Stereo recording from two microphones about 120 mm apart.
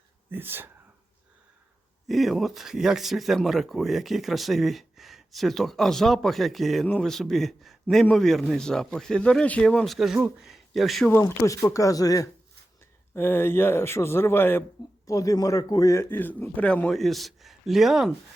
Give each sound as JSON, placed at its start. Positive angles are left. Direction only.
{"t": 0.3, "sound": "speech", "side_deg": -15}
{"t": 2.0, "sound": "speech", "side_deg": 0}
{"t": 11.1, "sound": "a man's voice", "side_deg": 20}
{"t": 13.1, "sound": "a man's voice", "side_deg": 20}
{"t": 15.0, "sound": "a man's voice", "side_deg": 30}
{"t": 16.9, "sound": "speech", "side_deg": 0}